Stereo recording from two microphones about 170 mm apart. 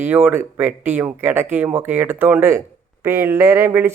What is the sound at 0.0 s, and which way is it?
Speech, 10° right (ahead or behind).